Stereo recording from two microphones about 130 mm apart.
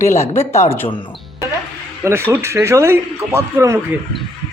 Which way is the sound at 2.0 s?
20° right (ahead or behind).